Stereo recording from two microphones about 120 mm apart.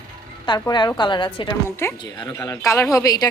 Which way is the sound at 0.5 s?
40° left (ahead or behind).